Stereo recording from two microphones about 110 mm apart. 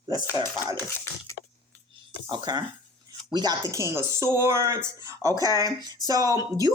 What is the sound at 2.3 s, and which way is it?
Speech, 40° right (ahead or behind).